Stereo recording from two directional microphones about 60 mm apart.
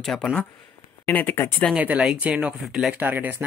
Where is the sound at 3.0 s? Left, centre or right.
Right.